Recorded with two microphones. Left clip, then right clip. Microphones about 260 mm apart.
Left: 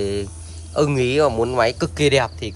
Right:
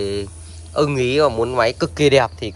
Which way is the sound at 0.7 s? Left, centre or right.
Centre.